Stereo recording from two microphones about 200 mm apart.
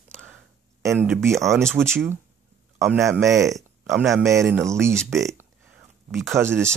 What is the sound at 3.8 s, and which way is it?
Speech, centre (ahead or behind).